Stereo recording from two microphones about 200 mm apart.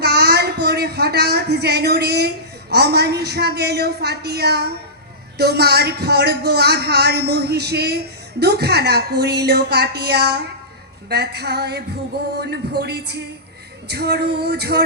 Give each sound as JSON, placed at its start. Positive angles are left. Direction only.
{"t": 0.0, "sound": "a man's voice", "side_deg": -55}